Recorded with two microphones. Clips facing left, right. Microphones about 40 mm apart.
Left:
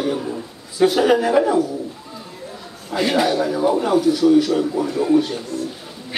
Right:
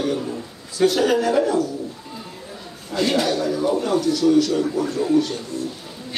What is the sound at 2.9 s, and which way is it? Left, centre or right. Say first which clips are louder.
A man's voice: left 2 dB; centre.